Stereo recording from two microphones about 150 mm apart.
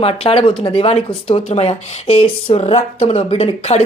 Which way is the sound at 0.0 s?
40° left (ahead or behind).